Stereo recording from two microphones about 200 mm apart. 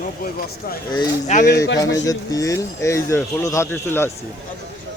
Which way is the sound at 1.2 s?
40° left (ahead or behind).